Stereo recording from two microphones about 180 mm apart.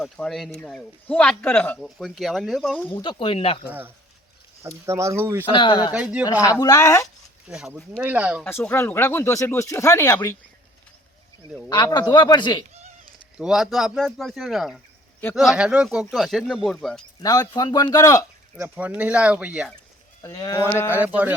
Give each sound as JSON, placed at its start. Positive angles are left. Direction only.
{"t": 0.0, "sound": "speech", "side_deg": 0}
{"t": 2.9, "sound": "speech", "side_deg": 25}
{"t": 3.7, "sound": "speech", "side_deg": -10}
{"t": 5.5, "sound": "a man's voice", "side_deg": 30}
{"t": 5.9, "sound": "speech", "side_deg": -5}
{"t": 6.4, "sound": "speech", "side_deg": 20}
{"t": 7.4, "sound": "speech", "side_deg": -5}
{"t": 8.4, "sound": "speech", "side_deg": 10}
{"t": 11.7, "sound": "a man's voice", "side_deg": 25}
{"t": 13.4, "sound": "speech", "side_deg": 0}
{"t": 17.5, "sound": "a man's voice", "side_deg": 20}
{"t": 18.5, "sound": "speech", "side_deg": -10}
{"t": 20.2, "sound": "a man's voice", "side_deg": 20}
{"t": 20.9, "sound": "speech", "side_deg": -10}